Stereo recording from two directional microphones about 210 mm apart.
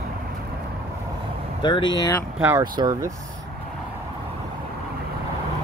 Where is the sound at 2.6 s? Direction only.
20° right (ahead or behind).